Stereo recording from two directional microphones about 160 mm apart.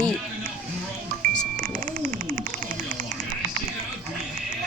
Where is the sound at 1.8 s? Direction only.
55° right (ahead or behind).